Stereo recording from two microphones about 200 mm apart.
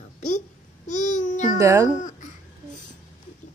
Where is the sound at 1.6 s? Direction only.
15° right (ahead or behind).